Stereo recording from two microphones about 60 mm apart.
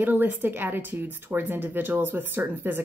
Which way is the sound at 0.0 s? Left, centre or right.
Right.